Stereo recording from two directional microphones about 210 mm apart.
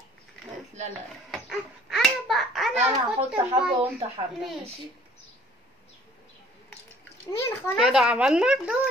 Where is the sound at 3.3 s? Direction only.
25° right (ahead or behind).